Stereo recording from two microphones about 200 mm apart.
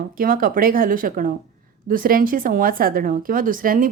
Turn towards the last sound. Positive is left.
turn(degrees=-45)  # may be behind; listen again after turning